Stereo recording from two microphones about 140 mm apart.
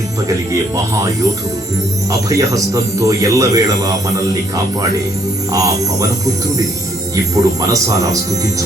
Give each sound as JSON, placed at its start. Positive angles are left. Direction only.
{"t": 2.3, "sound": "speech", "side_deg": -25}
{"t": 5.5, "sound": "speech", "side_deg": -25}